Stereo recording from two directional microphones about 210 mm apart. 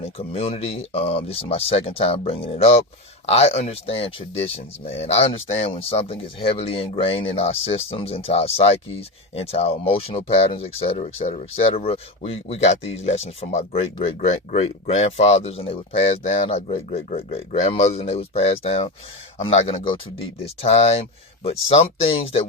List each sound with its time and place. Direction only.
0.0 s speech: 30° left (ahead or behind)